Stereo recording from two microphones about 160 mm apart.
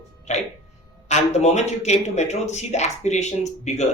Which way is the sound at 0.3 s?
45° left (ahead or behind).